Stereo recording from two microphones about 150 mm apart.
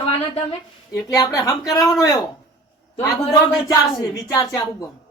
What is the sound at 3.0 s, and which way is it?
Speech, 25° left (ahead or behind).